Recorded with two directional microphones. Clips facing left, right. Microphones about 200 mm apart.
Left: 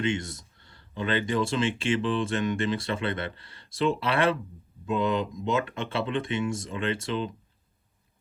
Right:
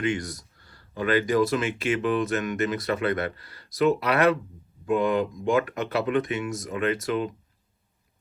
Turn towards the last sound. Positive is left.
turn(degrees=30)  # may be behind; listen again after turning